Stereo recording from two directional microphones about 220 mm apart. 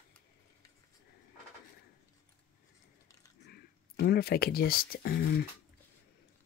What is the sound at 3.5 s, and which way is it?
Speech, 45° left (ahead or behind).